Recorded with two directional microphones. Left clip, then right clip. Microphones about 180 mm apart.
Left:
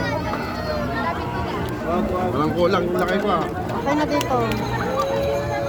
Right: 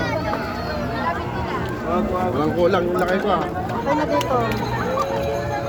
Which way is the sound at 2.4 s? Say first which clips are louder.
Right 1 dB; 65° left (ahead or behind).